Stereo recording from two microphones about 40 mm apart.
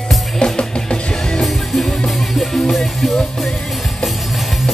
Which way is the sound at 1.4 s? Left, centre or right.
Centre.